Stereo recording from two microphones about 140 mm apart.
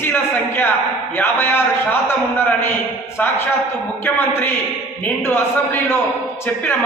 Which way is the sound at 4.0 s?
15° left (ahead or behind).